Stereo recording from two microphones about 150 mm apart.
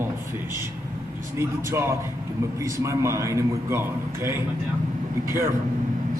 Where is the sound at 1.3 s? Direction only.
20° right (ahead or behind).